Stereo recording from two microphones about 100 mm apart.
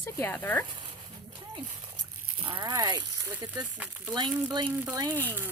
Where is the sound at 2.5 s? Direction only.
50° right (ahead or behind).